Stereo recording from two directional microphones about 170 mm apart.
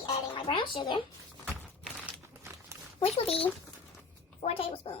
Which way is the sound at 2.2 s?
15° right (ahead or behind).